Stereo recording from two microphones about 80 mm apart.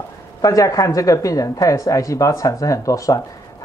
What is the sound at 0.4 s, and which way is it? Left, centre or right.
Speech, left.